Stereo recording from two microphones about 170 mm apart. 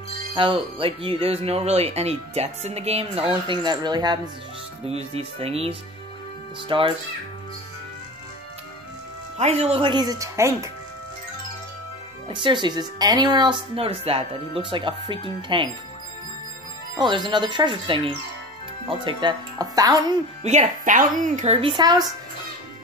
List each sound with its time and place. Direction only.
0.3 s speech: 30° right (ahead or behind)
4.8 s speech: 35° right (ahead or behind)
9.4 s speech: 40° right (ahead or behind); by 10.7 s 15° right (ahead or behind)
12.3 s speech: 30° right (ahead or behind)
16.9 s speech: 25° right (ahead or behind)
20.4 s speech: 45° right (ahead or behind); by 22.1 s 25° right (ahead or behind)